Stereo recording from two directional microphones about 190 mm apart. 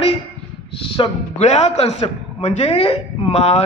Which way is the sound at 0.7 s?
30° left (ahead or behind).